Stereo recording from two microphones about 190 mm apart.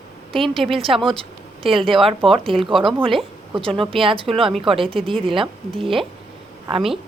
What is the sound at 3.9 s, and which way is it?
Speech, 25° right (ahead or behind).